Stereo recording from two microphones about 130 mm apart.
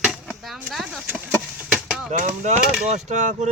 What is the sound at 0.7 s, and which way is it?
Speech, centre (ahead or behind).